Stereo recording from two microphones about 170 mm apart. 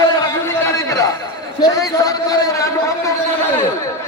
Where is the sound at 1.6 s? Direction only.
20° left (ahead or behind).